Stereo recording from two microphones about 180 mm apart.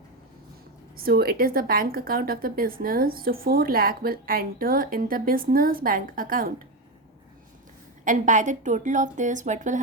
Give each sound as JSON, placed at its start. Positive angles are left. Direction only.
{"t": 0.9, "sound": "a woman's voice", "side_deg": -60}
{"t": 8.0, "sound": "speech", "side_deg": -45}